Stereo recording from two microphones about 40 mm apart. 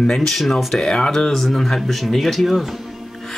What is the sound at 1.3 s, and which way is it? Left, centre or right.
Speech, centre.